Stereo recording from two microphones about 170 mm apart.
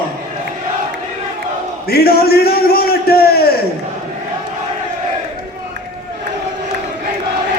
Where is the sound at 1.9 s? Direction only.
65° left (ahead or behind).